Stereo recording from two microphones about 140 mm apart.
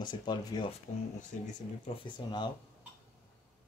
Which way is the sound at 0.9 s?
60° left (ahead or behind).